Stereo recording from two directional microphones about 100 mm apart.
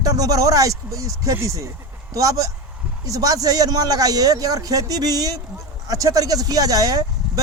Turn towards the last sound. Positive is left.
turn(degrees=-35)  # may be behind; listen again after turning